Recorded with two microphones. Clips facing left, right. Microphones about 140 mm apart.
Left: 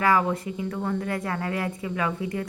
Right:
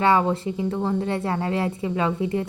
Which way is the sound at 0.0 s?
25° right (ahead or behind).